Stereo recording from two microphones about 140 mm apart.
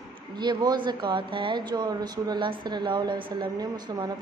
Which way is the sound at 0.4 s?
30° right (ahead or behind).